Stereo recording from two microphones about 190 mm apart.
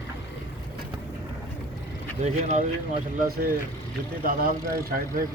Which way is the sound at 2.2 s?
40° right (ahead or behind).